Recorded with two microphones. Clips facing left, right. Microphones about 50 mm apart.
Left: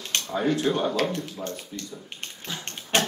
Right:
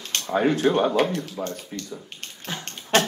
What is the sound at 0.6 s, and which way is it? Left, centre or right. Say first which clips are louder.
Speech: right 4 dB; right.